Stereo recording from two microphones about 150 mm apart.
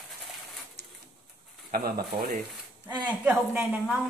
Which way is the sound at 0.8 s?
90° right.